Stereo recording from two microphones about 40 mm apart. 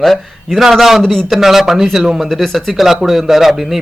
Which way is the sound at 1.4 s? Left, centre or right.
Centre.